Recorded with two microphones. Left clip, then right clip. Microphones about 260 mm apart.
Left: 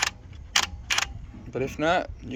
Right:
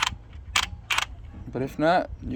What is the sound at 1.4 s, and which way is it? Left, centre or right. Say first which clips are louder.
Speech: right 2 dB; right.